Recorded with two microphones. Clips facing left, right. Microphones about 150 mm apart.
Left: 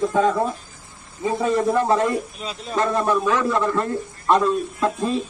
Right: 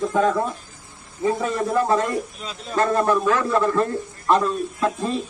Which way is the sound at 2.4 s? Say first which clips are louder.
Right 1 dB; 10° left (ahead or behind).